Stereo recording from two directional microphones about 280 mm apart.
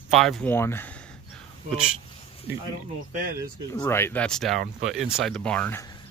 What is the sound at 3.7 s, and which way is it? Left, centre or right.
Speech, centre.